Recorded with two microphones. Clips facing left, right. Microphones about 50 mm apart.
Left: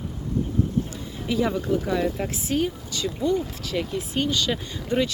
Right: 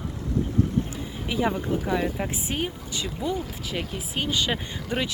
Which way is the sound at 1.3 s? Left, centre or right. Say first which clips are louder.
Left 2 dB; centre.